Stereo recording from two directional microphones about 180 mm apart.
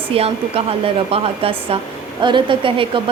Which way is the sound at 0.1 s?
35° right (ahead or behind).